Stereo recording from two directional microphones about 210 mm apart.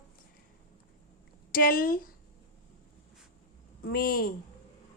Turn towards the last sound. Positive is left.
turn(degrees=45)  # may be behind; listen again after turning